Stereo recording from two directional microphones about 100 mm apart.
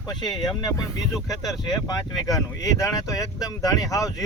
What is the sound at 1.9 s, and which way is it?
Speech, 35° left (ahead or behind).